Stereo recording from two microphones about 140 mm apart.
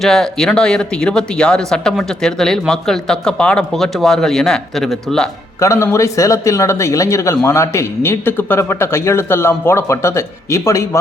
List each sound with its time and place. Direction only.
0.0 s speech: 5° left (ahead or behind)
5.5 s speech: 20° left (ahead or behind)